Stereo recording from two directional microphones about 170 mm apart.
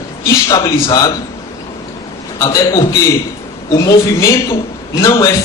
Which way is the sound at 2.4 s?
20° left (ahead or behind).